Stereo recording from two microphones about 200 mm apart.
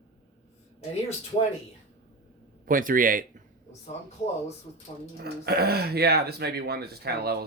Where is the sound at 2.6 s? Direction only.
45° right (ahead or behind).